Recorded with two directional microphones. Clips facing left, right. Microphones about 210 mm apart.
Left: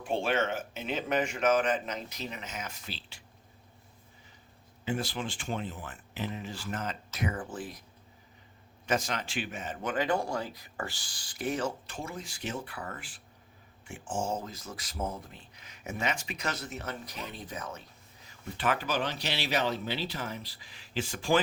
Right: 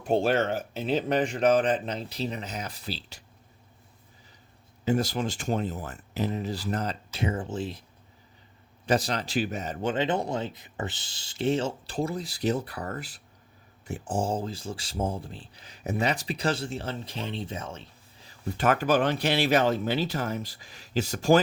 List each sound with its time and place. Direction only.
0.0 s speech: 40° right (ahead or behind)
4.9 s speech: 40° right (ahead or behind); by 7.9 s 25° right (ahead or behind)
8.9 s speech: 35° right (ahead or behind)
9.8 s speech: 25° right (ahead or behind)
18.5 s speech: 45° right (ahead or behind)